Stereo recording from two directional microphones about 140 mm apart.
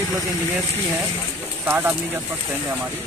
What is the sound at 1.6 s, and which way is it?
Speech, 15° right (ahead or behind).